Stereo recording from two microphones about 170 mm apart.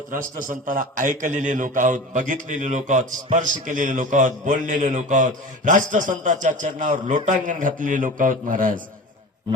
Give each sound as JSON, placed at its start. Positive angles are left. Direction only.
{"t": 0.1, "sound": "a man's voice", "side_deg": -50}